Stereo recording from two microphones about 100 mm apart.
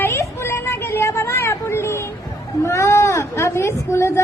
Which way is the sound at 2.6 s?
30° left (ahead or behind).